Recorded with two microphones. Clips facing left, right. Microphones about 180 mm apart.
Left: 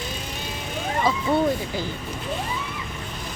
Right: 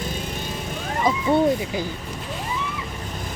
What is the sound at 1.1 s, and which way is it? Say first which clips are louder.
Speech: right 3 dB; 20° right (ahead or behind).